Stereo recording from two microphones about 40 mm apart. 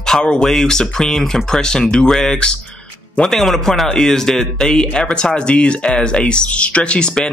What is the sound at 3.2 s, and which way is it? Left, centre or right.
A man's voice, centre.